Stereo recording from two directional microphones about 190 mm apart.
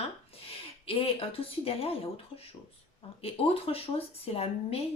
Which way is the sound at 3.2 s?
30° left (ahead or behind).